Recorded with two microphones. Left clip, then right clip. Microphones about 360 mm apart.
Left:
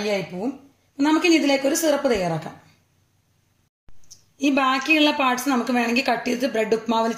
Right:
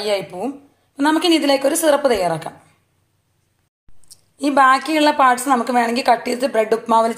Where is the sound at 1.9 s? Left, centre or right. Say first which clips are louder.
Right 8 dB; right.